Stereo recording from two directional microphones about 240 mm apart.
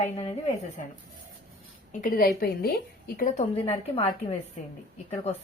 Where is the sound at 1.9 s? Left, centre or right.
Left.